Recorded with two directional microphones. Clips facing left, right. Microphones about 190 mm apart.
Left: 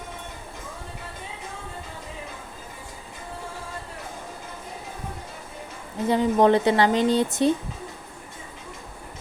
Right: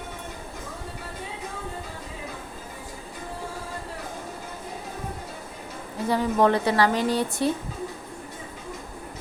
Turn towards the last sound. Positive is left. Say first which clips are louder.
# left 3 dB
turn(degrees=20)  # may be behind; listen again after turning